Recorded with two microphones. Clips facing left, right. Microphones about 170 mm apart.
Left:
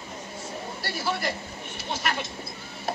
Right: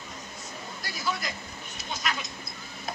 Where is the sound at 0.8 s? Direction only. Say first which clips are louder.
Left 4 dB; 30° left (ahead or behind).